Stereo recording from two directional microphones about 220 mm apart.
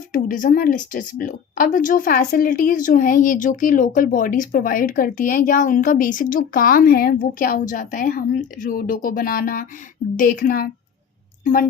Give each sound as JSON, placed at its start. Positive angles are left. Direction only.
{"t": 0.1, "sound": "speech", "side_deg": 35}